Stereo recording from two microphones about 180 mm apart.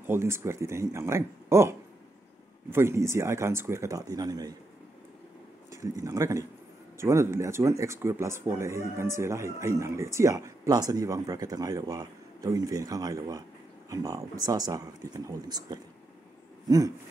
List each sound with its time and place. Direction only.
0.0 s speech: 15° right (ahead or behind)
5.7 s speech: 20° right (ahead or behind)
16.6 s a sound: 20° right (ahead or behind)